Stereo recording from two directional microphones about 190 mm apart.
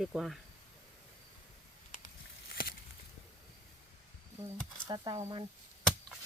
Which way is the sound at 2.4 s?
55° left (ahead or behind).